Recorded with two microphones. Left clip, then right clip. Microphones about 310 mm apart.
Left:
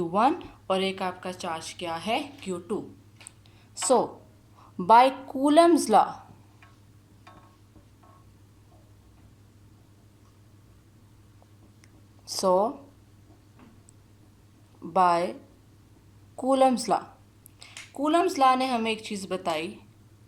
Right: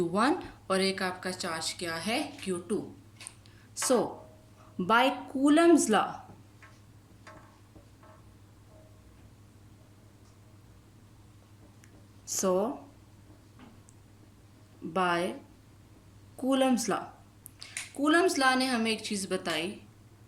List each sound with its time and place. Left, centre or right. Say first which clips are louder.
0.0 s speech: left 4 dB; centre
3.8 s speech: left 4 dB; centre
12.2 s a sound: left 6 dB; centre
14.9 s speech: left 7 dB; centre
16.5 s speech: left 6 dB; centre